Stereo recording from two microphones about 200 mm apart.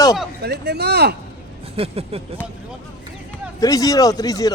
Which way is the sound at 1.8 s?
30° right (ahead or behind).